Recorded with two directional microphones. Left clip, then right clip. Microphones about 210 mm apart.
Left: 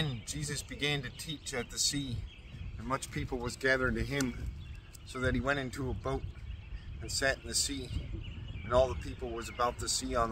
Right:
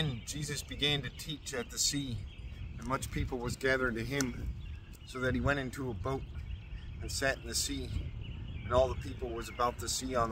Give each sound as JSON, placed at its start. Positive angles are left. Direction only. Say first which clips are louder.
{"t": 0.3, "sound": "speech", "louder": "even", "side_deg": -10}